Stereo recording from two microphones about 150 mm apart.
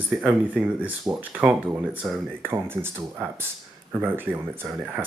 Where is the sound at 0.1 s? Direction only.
10° right (ahead or behind).